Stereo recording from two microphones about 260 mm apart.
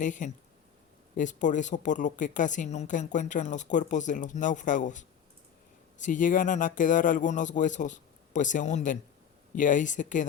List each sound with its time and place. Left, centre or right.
0.0 s speech: left